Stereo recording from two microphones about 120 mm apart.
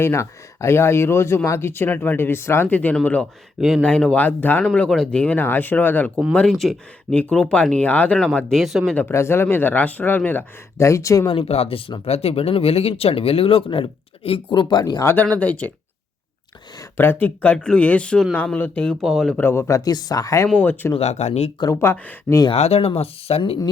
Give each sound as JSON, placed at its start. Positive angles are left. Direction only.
{"t": 0.0, "sound": "speech", "side_deg": 25}
{"t": 6.5, "sound": "speech", "side_deg": 0}
{"t": 9.0, "sound": "speech", "side_deg": 20}
{"t": 11.3, "sound": "speech", "side_deg": 55}
{"t": 15.0, "sound": "speech", "side_deg": 15}
{"t": 17.0, "sound": "speech", "side_deg": 15}
{"t": 19.4, "sound": "speech", "side_deg": 20}
{"t": 20.6, "sound": "speech", "side_deg": 15}
{"t": 21.0, "sound": "speech", "side_deg": 70}
{"t": 21.6, "sound": "speech", "side_deg": 25}
{"t": 22.5, "sound": "speech", "side_deg": 55}